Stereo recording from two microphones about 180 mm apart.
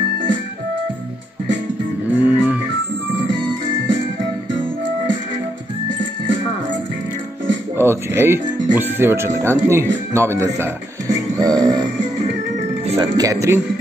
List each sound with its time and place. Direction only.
2.1 s music: 10° right (ahead or behind)
7.7 s speech: 15° right (ahead or behind)
11.3 s music: 20° right (ahead or behind)
12.9 s speech: 25° right (ahead or behind)